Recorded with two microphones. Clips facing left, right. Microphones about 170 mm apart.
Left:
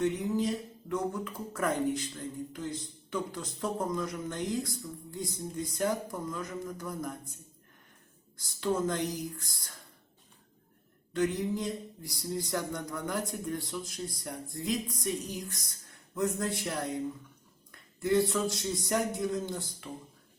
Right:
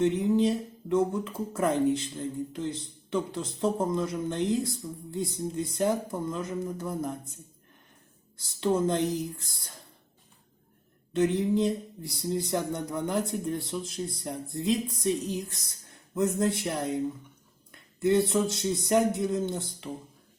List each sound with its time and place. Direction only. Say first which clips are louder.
0.0 s speech: right 6 dB; 25° right (ahead or behind)
8.6 s speech: right 5 dB; 25° right (ahead or behind)
11.1 s speech: right 5 dB; 25° right (ahead or behind)